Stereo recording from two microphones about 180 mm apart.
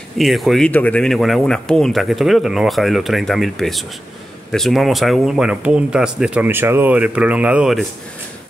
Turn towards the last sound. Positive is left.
turn(degrees=-5)  # may be behind; listen again after turning